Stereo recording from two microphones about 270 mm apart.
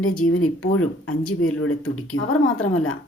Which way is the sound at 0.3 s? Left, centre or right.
Left.